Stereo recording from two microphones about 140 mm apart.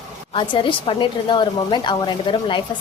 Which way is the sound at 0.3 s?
40° left (ahead or behind).